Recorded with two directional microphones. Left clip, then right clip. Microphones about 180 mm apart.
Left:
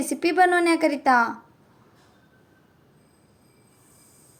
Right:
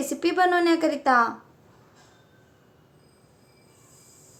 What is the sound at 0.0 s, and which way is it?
Speech, 15° left (ahead or behind).